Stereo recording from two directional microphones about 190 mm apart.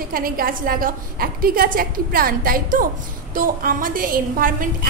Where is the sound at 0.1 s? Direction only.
50° right (ahead or behind).